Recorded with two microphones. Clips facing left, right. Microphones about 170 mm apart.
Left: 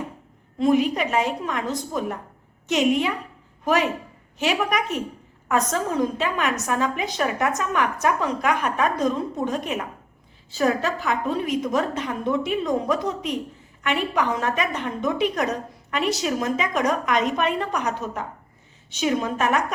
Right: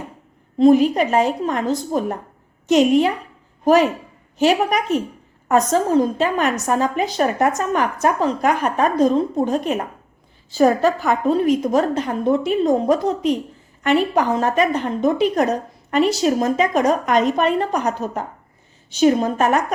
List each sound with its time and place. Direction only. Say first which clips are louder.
0.6 s a woman's voice: right 7 dB; 35° right (ahead or behind)